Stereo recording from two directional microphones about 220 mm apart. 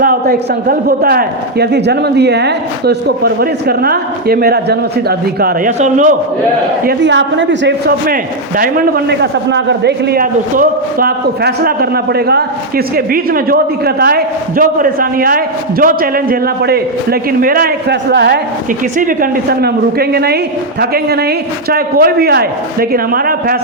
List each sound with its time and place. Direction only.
0.0 s a man's voice: 40° right (ahead or behind)
6.8 s a man's voice: 55° right (ahead or behind)
18.9 s a man's voice: 40° right (ahead or behind)